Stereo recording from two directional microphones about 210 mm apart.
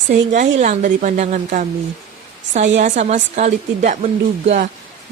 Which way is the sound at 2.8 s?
35° right (ahead or behind).